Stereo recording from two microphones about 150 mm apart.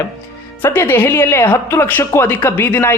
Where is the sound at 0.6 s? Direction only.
15° left (ahead or behind).